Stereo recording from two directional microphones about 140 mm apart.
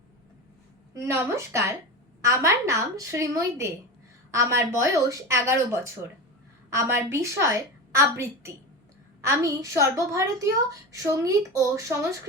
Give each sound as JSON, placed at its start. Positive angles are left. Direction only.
{"t": 0.9, "sound": "a woman's voice", "side_deg": -20}